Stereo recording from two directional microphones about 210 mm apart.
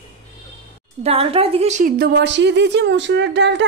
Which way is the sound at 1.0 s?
30° right (ahead or behind).